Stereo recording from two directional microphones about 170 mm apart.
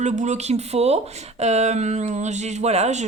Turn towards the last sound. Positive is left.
turn(degrees=-40)  # may be behind; listen again after turning